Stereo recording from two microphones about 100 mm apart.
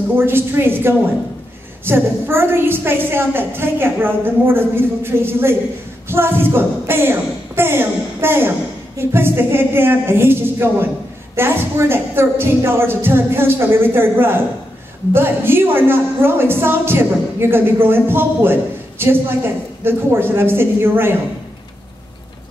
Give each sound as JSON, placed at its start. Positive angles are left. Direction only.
{"t": 0.1, "sound": "a woman's voice", "side_deg": -25}